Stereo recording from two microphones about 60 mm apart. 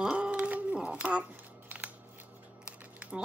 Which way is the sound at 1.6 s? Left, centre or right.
Right.